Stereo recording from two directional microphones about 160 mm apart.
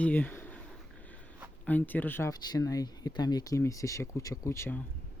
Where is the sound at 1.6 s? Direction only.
10° left (ahead or behind).